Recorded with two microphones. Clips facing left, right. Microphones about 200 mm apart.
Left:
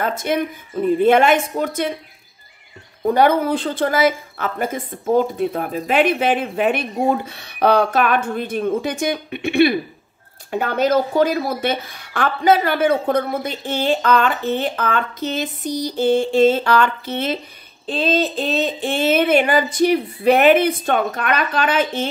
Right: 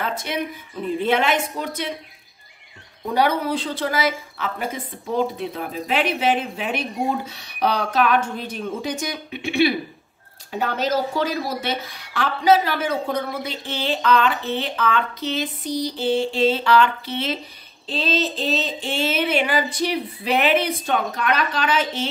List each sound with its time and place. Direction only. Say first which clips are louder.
0.0 s speech: left 6 dB; 45° left (ahead or behind)
3.1 s speech: left 5 dB; 50° left (ahead or behind)